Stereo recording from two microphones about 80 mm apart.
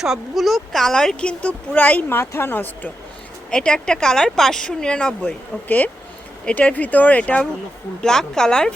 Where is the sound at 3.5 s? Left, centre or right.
Centre.